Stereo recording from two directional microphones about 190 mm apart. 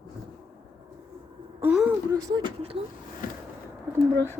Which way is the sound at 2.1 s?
20° right (ahead or behind).